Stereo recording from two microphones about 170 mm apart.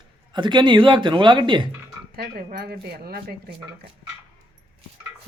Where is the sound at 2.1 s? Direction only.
70° right (ahead or behind).